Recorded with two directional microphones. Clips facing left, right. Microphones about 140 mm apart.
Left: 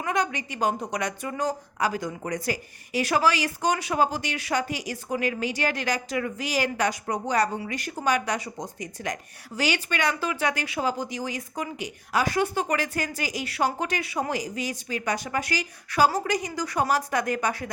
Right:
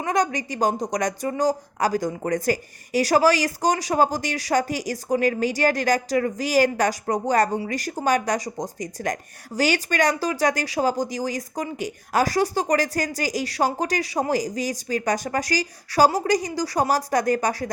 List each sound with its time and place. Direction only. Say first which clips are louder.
0.0 s a woman's voice: right 4 dB; 40° right (ahead or behind)